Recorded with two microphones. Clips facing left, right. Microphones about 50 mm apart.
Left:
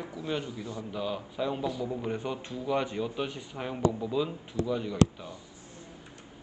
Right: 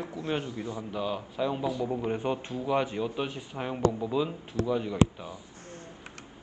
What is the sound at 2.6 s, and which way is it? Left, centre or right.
A man's voice, centre.